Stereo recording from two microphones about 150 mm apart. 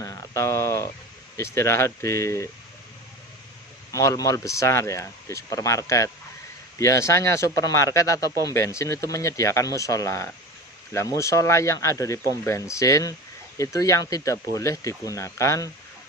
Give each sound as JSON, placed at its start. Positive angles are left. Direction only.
{"t": 0.0, "sound": "a sound", "side_deg": 20}
{"t": 1.3, "sound": "speech", "side_deg": 20}
{"t": 3.9, "sound": "speech", "side_deg": 20}